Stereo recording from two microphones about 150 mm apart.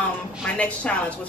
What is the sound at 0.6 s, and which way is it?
Speech, 10° left (ahead or behind).